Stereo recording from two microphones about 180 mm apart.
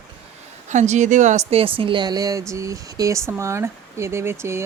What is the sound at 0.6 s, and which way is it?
A woman's voice, 40° right (ahead or behind).